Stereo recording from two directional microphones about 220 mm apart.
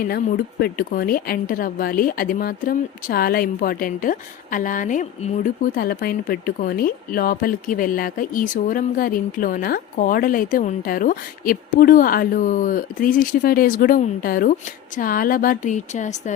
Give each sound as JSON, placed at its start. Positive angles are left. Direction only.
{"t": 0.6, "sound": "a woman's voice", "side_deg": 40}